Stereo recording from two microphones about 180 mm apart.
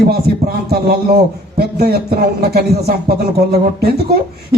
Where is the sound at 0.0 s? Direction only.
60° right (ahead or behind).